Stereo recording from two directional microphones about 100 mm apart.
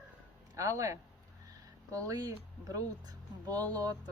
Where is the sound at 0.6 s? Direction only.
30° right (ahead or behind).